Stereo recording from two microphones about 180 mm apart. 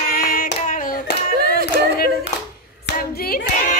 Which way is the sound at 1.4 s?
55° right (ahead or behind).